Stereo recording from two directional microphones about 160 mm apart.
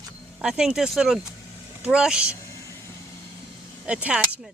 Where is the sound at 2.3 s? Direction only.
20° left (ahead or behind).